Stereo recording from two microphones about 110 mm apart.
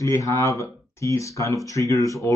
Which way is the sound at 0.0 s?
30° left (ahead or behind).